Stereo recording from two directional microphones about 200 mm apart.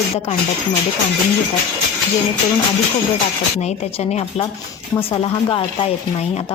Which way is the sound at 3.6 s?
35° left (ahead or behind).